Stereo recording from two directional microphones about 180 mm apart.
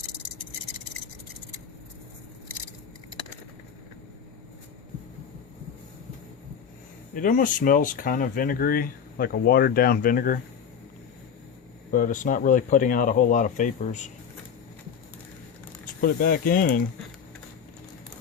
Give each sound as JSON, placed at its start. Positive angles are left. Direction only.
{"t": 7.1, "sound": "speech", "side_deg": 50}
{"t": 11.9, "sound": "speech", "side_deg": 50}
{"t": 16.0, "sound": "speech", "side_deg": 55}